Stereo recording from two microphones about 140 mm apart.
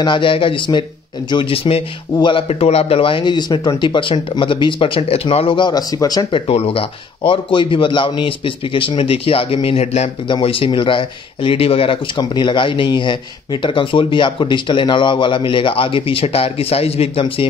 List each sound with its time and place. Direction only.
0.0 s speech: 35° left (ahead or behind)